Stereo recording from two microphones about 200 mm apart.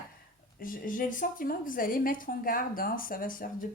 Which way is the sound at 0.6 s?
45° left (ahead or behind).